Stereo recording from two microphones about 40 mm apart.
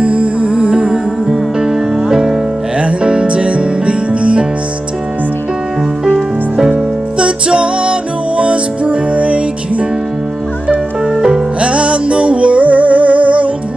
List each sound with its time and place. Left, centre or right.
0.0 s music: right
6.7 s music: right
11.6 s music: right